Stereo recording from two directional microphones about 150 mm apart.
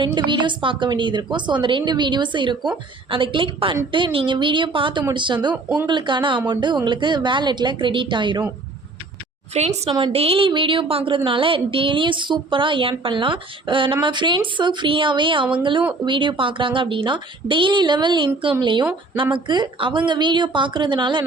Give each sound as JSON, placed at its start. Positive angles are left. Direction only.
{"t": 0.0, "sound": "a woman's voice", "side_deg": -30}
{"t": 9.6, "sound": "a woman's voice", "side_deg": -45}